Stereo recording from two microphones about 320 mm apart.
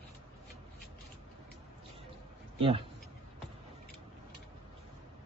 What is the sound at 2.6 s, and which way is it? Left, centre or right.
Speech, centre.